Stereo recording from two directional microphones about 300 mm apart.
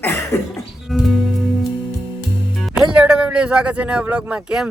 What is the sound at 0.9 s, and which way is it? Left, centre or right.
Speech, centre.